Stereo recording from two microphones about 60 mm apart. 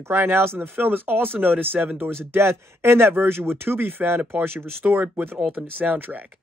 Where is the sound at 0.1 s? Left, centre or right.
Right.